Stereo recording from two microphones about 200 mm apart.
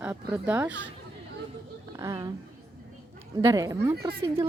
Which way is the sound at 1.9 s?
15° right (ahead or behind).